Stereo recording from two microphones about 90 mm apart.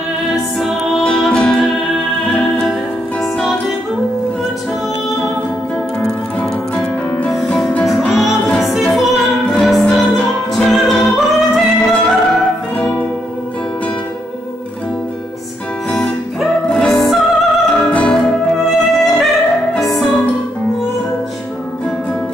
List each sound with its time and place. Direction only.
0.6 s music: 5° right (ahead or behind)
1.0 s music: 10° left (ahead or behind)
5.9 s music: 10° left (ahead or behind)
7.8 s music: centre (ahead or behind)
12.7 s music: 15° left (ahead or behind)
15.9 s music: 5° left (ahead or behind)